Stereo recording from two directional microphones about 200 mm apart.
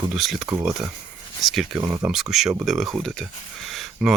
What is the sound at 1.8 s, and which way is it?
Speech, 20° right (ahead or behind).